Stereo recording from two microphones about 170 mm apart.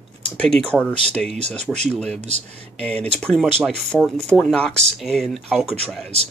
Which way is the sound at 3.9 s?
5° left (ahead or behind).